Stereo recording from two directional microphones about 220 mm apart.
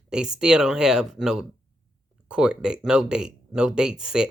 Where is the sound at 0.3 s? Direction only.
5° right (ahead or behind).